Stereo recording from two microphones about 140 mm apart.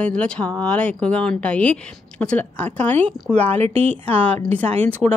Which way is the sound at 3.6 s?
45° right (ahead or behind).